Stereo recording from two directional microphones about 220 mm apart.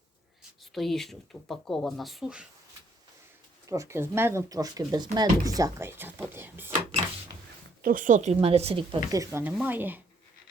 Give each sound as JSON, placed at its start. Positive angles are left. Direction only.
{"t": 0.7, "sound": "speech", "side_deg": 0}
{"t": 3.7, "sound": "speech", "side_deg": -15}
{"t": 7.8, "sound": "speech", "side_deg": -40}